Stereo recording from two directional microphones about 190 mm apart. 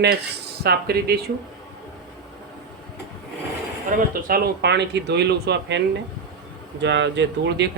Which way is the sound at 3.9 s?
55° right (ahead or behind).